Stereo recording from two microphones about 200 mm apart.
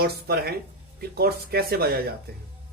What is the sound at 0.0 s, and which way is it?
Speech, 50° right (ahead or behind).